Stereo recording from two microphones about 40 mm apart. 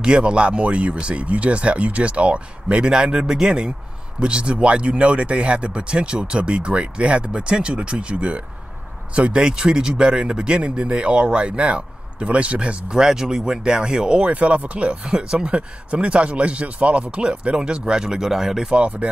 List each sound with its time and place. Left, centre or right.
0.0 s speech: right
9.4 s speech: centre
12.9 s speech: centre; by 15.0 s right
15.0 s speech: centre
18.2 s speech: centre
18.8 s speech: right